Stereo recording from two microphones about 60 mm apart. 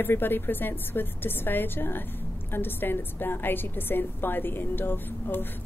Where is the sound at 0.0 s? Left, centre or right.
Left.